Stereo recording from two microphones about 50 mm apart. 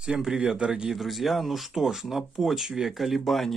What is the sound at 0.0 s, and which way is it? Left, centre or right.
Speech, centre.